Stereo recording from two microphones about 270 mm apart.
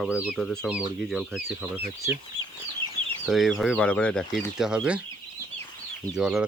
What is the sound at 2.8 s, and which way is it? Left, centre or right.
Chicken, centre.